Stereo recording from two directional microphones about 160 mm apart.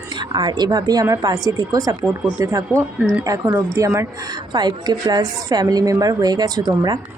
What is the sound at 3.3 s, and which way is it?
Speech, 20° right (ahead or behind).